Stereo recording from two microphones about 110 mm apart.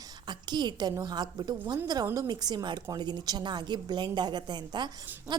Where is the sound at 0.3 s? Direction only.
40° right (ahead or behind).